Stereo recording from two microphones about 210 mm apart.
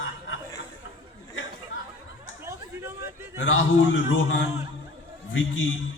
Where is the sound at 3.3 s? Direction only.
70° left (ahead or behind).